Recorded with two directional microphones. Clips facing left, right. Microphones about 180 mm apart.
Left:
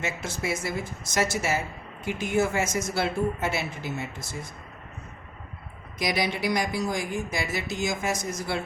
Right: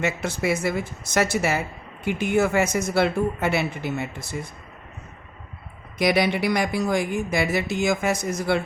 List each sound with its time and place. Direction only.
0.0 s speech: 60° right (ahead or behind)
6.0 s speech: 60° right (ahead or behind)